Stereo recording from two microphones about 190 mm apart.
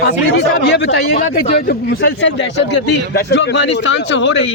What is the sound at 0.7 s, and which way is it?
Speech, 65° left (ahead or behind).